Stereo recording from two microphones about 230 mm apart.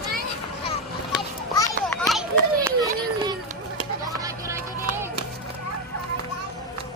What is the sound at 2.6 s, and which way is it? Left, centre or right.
Run, centre.